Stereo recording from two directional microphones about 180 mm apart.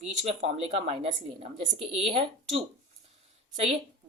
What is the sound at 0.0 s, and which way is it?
Speech, 35° right (ahead or behind).